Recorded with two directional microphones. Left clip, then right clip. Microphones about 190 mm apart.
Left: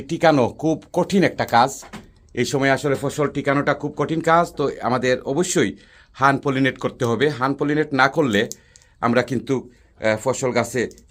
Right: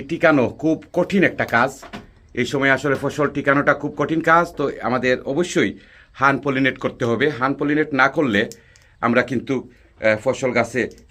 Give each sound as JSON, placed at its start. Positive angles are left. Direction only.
{"t": 0.1, "sound": "speech", "side_deg": 30}